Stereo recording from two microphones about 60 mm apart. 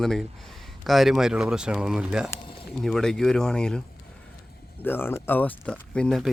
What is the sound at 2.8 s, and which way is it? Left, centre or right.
Speech, centre.